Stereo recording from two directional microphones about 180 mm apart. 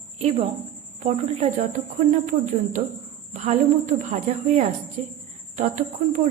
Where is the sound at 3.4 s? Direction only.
40° right (ahead or behind).